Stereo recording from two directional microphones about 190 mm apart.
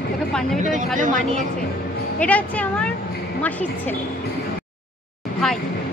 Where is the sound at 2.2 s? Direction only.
5° left (ahead or behind).